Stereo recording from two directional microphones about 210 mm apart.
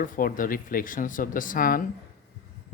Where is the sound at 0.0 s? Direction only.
40° left (ahead or behind).